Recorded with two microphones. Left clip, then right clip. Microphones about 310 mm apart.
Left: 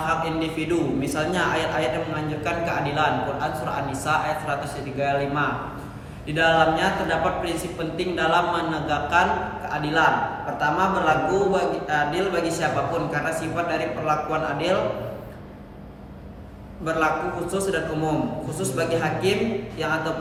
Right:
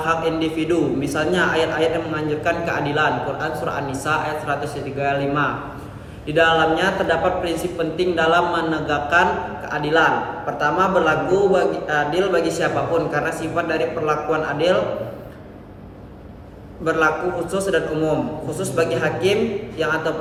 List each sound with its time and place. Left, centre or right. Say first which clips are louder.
0.0 s a man's voice: right 4 dB; centre
16.9 s a man's voice: right 4 dB; centre